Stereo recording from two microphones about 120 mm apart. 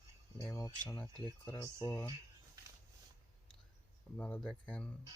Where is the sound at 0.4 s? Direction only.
25° left (ahead or behind).